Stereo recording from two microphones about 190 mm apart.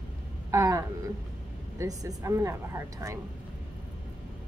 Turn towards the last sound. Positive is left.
turn(degrees=-15)  # may be behind; listen again after turning